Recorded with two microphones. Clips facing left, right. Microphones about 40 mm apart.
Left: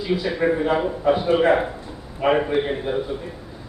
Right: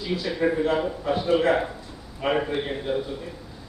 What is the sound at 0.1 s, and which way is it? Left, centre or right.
A man's voice, left.